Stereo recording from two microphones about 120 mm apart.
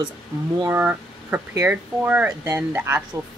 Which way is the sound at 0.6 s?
15° right (ahead or behind).